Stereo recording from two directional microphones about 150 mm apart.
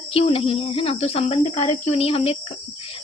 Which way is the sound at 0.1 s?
40° left (ahead or behind).